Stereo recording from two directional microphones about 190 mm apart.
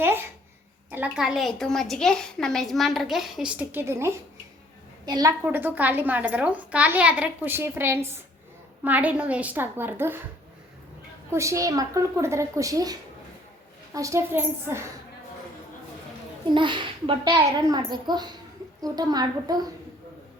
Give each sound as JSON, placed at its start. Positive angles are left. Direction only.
{"t": 0.0, "sound": "babbling", "side_deg": -10}
{"t": 0.9, "sound": "a woman's voice", "side_deg": -10}
{"t": 5.5, "sound": "a woman's voice", "side_deg": -10}
{"t": 11.3, "sound": "a woman's voice", "side_deg": -15}
{"t": 16.6, "sound": "speech", "side_deg": -25}